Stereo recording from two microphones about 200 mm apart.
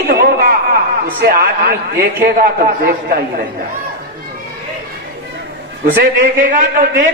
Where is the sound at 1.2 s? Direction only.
50° right (ahead or behind).